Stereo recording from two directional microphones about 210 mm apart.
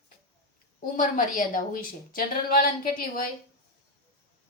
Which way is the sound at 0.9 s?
40° left (ahead or behind).